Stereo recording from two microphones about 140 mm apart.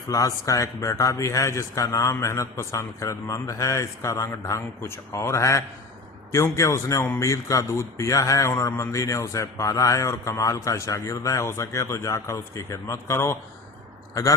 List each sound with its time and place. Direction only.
0.1 s a man's voice: 25° left (ahead or behind)